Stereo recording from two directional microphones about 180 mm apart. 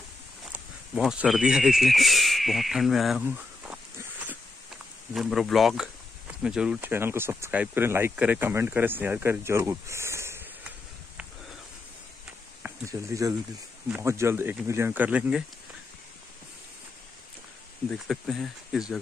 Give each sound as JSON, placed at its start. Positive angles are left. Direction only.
{"t": 0.5, "sound": "speech", "side_deg": -5}
{"t": 3.3, "sound": "a sound", "side_deg": -10}
{"t": 5.1, "sound": "speech", "side_deg": 0}
{"t": 12.6, "sound": "speech", "side_deg": -15}
{"t": 17.8, "sound": "speech", "side_deg": 5}